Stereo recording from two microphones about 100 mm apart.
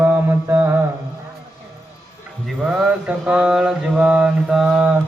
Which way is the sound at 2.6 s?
5° right (ahead or behind).